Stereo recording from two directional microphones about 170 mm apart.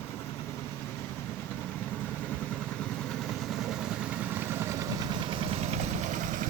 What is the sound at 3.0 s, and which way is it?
Vehicle, centre (ahead or behind).